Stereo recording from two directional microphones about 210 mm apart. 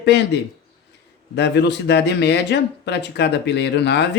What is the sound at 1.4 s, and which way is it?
Speech, 55° left (ahead or behind).